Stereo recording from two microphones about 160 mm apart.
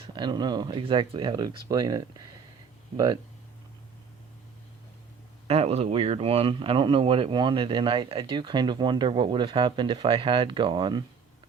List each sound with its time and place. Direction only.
0.0 s speech: 30° right (ahead or behind)
5.5 s speech: 40° right (ahead or behind)